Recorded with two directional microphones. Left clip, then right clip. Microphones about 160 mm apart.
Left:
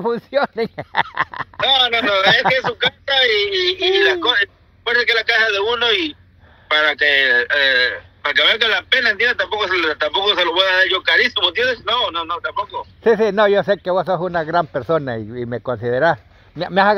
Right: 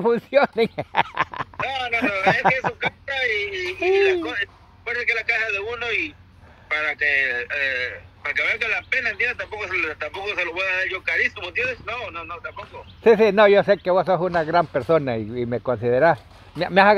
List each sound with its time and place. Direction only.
0.7 s speech: centre (ahead or behind)
1.6 s a man's voice: 50° left (ahead or behind)
13.0 s a man's voice: 20° left (ahead or behind)